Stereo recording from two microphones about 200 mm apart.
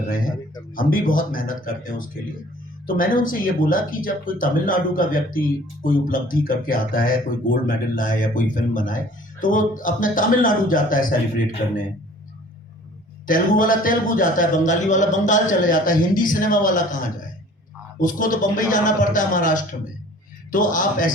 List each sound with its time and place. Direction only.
0.8 s speech: 45° left (ahead or behind)
13.2 s a man's voice: 45° left (ahead or behind)
18.0 s a man's voice: 40° left (ahead or behind)